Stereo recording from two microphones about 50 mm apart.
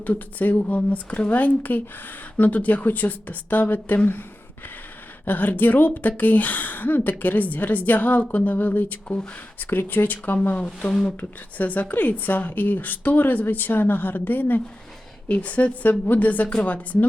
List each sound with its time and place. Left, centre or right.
0.0 s a woman's voice: left
9.6 s speech: left
10.4 s a woman's voice: left